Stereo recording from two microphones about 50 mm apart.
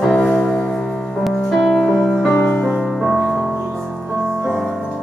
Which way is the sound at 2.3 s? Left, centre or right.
Centre.